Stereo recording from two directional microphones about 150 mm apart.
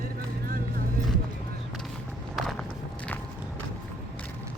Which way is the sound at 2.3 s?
Centre (ahead or behind).